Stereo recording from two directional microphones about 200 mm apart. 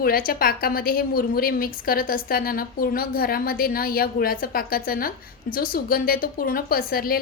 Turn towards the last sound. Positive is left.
turn(degrees=50)  # may be behind; listen again after turning